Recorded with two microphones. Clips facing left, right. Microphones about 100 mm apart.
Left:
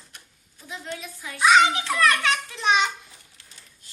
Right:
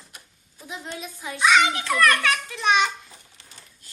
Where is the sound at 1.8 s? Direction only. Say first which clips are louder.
Right 1 dB; 25° left (ahead or behind).